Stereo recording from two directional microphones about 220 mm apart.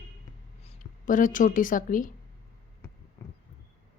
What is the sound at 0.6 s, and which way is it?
A woman's voice, 35° left (ahead or behind).